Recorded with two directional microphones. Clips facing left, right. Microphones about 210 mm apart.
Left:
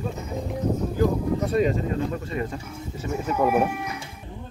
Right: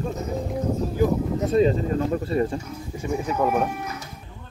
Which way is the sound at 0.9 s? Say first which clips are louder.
Right 1 dB; 25° right (ahead or behind).